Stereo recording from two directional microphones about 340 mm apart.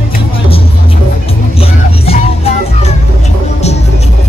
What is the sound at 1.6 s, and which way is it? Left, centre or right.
Music, centre.